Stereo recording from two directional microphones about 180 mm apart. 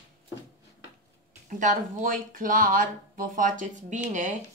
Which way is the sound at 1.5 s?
45° right (ahead or behind).